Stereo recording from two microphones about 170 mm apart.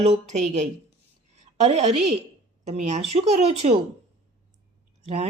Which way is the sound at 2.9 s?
40° right (ahead or behind).